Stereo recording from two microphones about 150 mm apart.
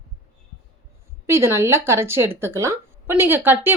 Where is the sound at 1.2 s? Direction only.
15° right (ahead or behind).